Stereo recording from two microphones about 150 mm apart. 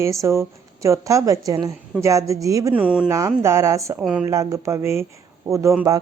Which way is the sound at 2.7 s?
10° right (ahead or behind).